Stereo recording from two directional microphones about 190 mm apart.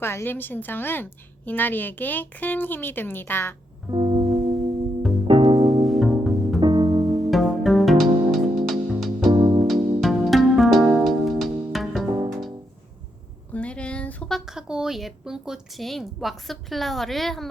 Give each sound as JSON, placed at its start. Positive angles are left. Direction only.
{"t": 0.0, "sound": "a woman's voice", "side_deg": 10}
{"t": 3.8, "sound": "music", "side_deg": -25}
{"t": 5.3, "sound": "music", "side_deg": -25}
{"t": 5.8, "sound": "music", "side_deg": 0}
{"t": 6.6, "sound": "music", "side_deg": -20}
{"t": 7.3, "sound": "music", "side_deg": 0}
{"t": 9.3, "sound": "music", "side_deg": -20}
{"t": 10.0, "sound": "music", "side_deg": 0}
{"t": 13.5, "sound": "a sound", "side_deg": 5}